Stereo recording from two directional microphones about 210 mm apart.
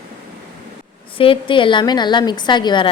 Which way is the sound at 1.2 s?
25° left (ahead or behind).